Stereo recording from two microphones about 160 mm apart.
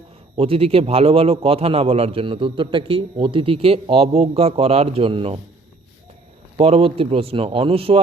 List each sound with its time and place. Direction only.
0.3 s a man's voice: 35° right (ahead or behind)
6.6 s a man's voice: 40° right (ahead or behind)